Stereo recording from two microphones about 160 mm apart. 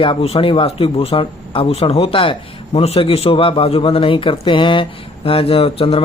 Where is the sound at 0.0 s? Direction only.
35° left (ahead or behind).